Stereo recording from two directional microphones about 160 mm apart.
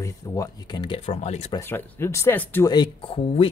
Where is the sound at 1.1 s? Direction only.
40° left (ahead or behind).